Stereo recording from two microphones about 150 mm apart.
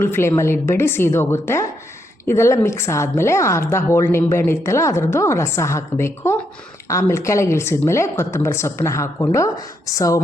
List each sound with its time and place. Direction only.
0.0 s a woman's voice: 15° left (ahead or behind)